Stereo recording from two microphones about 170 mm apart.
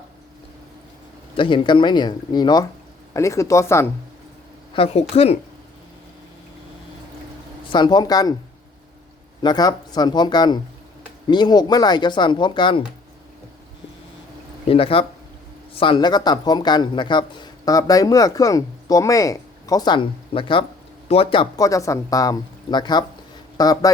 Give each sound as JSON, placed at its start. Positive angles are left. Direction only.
{"t": 1.4, "sound": "speech", "side_deg": 30}
{"t": 4.7, "sound": "speech", "side_deg": 30}
{"t": 7.7, "sound": "speech", "side_deg": 25}
{"t": 9.4, "sound": "speech", "side_deg": 25}
{"t": 14.7, "sound": "speech", "side_deg": 30}
{"t": 21.5, "sound": "speech", "side_deg": 20}